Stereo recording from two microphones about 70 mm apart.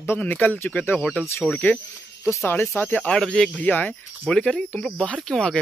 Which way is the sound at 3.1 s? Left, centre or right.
Centre.